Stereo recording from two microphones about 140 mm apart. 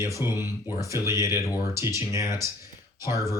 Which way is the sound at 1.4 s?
25° left (ahead or behind).